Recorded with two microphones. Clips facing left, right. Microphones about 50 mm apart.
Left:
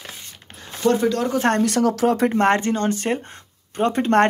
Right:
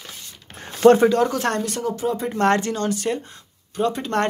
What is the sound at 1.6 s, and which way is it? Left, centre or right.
Speech, left.